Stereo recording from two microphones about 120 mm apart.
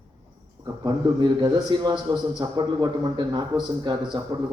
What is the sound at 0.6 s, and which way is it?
A man's voice, 40° right (ahead or behind).